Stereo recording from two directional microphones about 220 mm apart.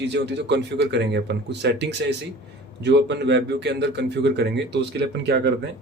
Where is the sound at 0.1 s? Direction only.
50° right (ahead or behind).